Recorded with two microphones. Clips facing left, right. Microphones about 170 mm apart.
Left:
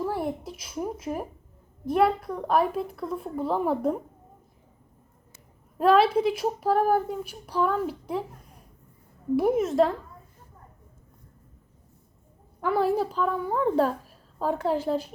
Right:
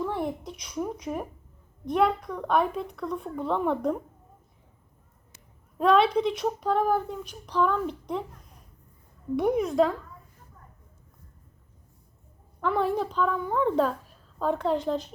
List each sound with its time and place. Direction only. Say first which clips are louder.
0.1 s a sound: left 1 dB; 5° left (ahead or behind)
1.8 s speech: left 2 dB; 5° left (ahead or behind)
5.7 s a woman's voice: left 1 dB; 5° left (ahead or behind)
12.6 s a woman's voice: left 2 dB; 5° left (ahead or behind)